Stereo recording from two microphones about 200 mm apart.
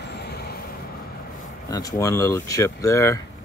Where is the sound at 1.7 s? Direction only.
15° left (ahead or behind).